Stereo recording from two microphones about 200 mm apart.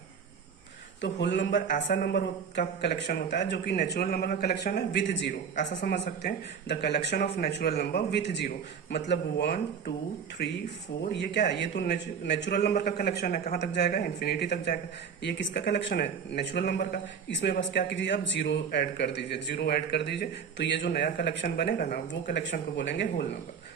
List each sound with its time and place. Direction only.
1.0 s a man's voice: 60° left (ahead or behind)
1.7 s a man's voice: 50° left (ahead or behind)
5.5 s speech: 40° left (ahead or behind)
6.2 s a man's voice: 55° left (ahead or behind)